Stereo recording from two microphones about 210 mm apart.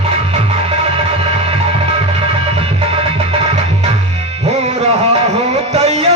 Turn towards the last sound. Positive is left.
turn(degrees=-30)  # may be behind; listen again after turning